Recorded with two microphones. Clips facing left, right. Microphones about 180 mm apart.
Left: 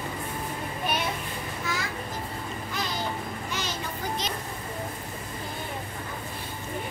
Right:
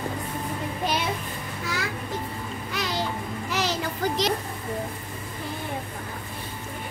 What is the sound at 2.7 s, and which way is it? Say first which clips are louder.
Babbling: right 3 dB; 80° right.